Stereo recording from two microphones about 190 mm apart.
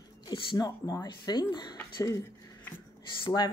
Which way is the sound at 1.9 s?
15° left (ahead or behind).